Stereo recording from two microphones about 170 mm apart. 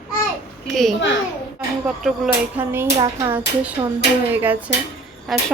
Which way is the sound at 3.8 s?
20° right (ahead or behind).